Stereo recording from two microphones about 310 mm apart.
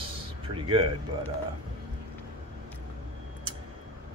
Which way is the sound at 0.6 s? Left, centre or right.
Centre.